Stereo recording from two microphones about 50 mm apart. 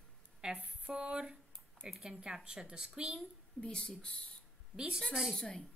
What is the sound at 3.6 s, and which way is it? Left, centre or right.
Speech, centre.